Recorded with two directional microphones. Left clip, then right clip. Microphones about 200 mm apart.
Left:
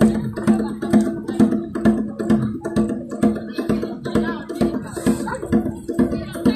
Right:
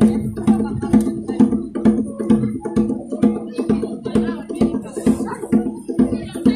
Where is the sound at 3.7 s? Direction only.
30° left (ahead or behind).